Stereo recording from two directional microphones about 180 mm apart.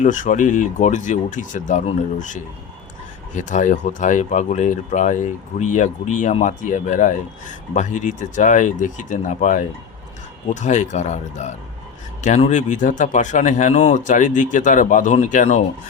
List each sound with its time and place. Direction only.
0.0 s speech: 45° left (ahead or behind)